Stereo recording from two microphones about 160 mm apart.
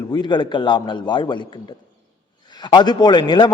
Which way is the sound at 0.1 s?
30° left (ahead or behind).